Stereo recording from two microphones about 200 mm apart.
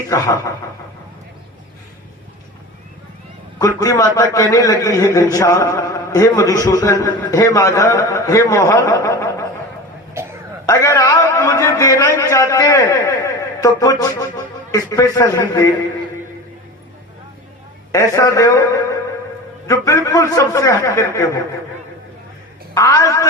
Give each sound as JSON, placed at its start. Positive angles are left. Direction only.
{"t": 0.1, "sound": "a man's voice", "side_deg": 15}
{"t": 3.6, "sound": "a man's voice", "side_deg": 15}
{"t": 10.7, "sound": "a man's voice", "side_deg": 15}
{"t": 17.9, "sound": "a man's voice", "side_deg": 15}
{"t": 22.7, "sound": "a man's voice", "side_deg": 15}